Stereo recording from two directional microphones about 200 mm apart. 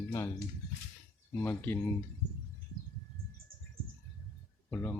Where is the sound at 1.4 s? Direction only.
10° left (ahead or behind).